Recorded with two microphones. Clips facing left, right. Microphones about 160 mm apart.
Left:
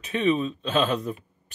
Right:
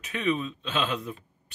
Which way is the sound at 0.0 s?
30° left (ahead or behind).